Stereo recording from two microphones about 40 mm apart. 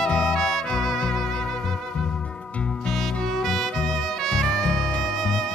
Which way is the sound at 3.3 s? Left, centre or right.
Centre.